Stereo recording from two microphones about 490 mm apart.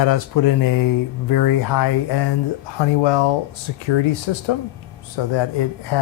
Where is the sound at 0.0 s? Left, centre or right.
Left.